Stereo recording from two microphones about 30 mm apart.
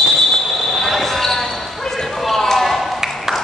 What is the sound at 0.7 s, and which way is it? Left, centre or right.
Basketball bounce, centre.